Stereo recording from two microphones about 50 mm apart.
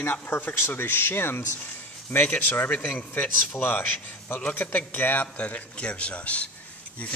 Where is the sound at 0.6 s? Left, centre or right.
Left.